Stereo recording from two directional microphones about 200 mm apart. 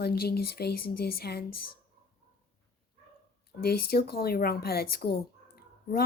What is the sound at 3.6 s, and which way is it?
Speech, 50° left (ahead or behind).